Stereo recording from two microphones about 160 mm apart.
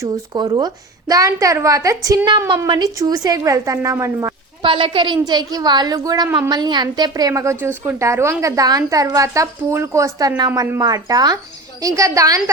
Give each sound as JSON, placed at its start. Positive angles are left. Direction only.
{"t": 0.0, "sound": "a woman's voice", "side_deg": -25}
{"t": 4.6, "sound": "a woman's voice", "side_deg": -30}